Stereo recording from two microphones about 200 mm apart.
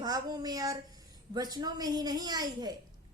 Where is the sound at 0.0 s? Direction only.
20° right (ahead or behind).